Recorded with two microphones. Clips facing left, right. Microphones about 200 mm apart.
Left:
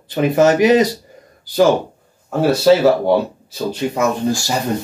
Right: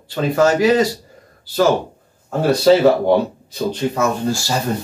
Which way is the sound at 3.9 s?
15° left (ahead or behind).